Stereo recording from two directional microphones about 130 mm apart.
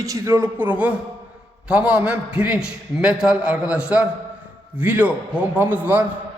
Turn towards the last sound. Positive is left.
turn(degrees=-15)  # may be behind; listen again after turning